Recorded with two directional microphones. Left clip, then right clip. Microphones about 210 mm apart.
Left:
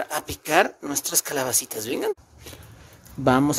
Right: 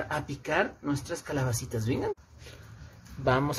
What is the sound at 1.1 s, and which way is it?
Speech, 50° left (ahead or behind).